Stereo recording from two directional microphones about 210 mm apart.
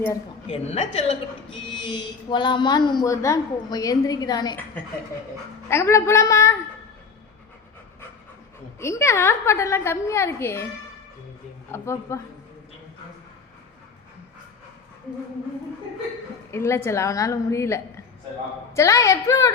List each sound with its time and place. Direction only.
0.4 s a woman's voice: 30° left (ahead or behind)
5.6 s a woman's voice: 10° left (ahead or behind)
8.8 s a woman's voice: 15° left (ahead or behind)
11.7 s a woman's voice: 15° left (ahead or behind)
16.5 s a woman's voice: 10° left (ahead or behind)